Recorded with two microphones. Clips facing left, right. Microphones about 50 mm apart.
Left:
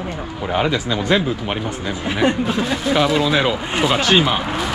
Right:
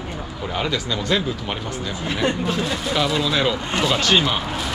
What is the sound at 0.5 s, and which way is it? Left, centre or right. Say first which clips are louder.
Speech: left 5 dB; centre.